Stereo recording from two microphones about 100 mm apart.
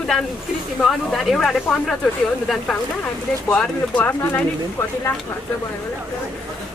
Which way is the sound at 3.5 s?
10° left (ahead or behind).